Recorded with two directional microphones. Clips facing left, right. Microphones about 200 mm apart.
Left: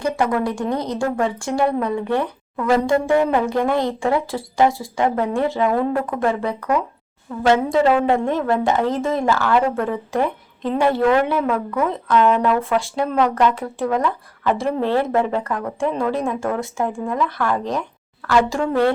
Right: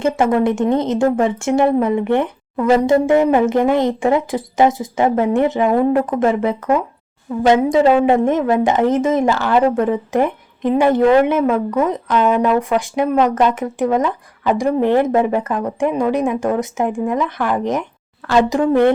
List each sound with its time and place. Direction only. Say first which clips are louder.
0.0 s a woman's voice: right 5 dB; 25° right (ahead or behind)